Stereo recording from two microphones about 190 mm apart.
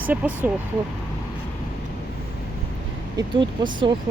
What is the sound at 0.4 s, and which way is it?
Speech, 10° right (ahead or behind).